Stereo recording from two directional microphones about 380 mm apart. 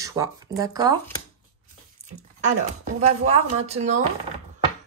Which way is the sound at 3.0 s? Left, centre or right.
Centre.